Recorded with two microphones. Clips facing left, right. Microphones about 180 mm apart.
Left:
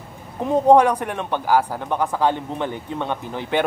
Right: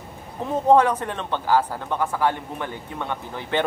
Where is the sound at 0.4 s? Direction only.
15° left (ahead or behind).